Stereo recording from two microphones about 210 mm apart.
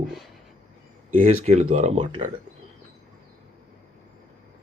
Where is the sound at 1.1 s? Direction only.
35° right (ahead or behind).